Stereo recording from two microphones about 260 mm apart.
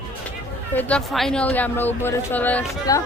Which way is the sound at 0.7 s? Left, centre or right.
Centre.